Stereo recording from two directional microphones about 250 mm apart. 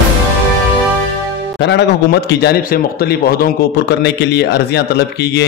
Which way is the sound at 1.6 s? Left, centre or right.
Left.